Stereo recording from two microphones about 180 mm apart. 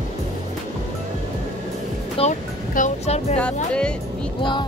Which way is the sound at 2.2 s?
30° left (ahead or behind).